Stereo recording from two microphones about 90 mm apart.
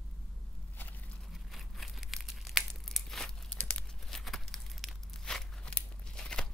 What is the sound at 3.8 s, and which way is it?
Tearing, centre (ahead or behind).